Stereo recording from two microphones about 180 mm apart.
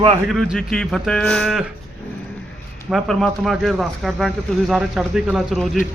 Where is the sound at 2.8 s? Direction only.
Centre (ahead or behind).